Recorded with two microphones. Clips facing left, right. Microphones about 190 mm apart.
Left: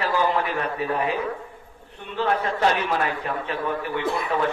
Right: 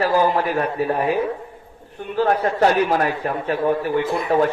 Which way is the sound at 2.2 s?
40° right (ahead or behind).